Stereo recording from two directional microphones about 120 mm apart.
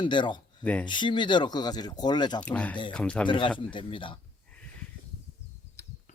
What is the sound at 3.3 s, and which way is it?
Speech, 45° left (ahead or behind).